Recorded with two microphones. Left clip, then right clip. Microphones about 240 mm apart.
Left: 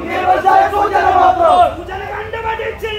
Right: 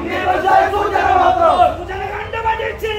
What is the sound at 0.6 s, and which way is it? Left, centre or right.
Battle cry, left.